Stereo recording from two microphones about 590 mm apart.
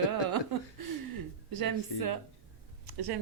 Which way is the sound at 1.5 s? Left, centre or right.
Right.